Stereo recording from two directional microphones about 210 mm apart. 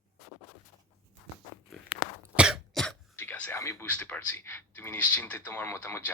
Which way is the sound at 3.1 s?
10° left (ahead or behind).